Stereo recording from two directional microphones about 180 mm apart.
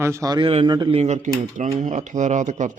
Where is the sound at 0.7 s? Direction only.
25° right (ahead or behind).